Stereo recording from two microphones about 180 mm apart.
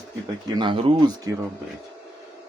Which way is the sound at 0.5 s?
30° right (ahead or behind).